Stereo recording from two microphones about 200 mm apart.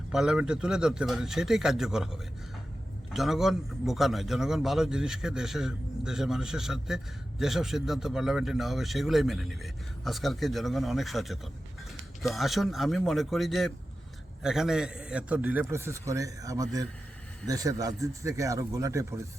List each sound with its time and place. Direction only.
0.1 s a man's voice: centre (ahead or behind)